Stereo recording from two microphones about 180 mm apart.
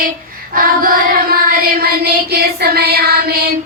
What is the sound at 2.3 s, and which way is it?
Child singing, 60° right (ahead or behind).